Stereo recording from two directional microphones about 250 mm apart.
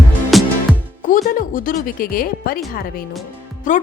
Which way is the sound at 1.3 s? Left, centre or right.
Left.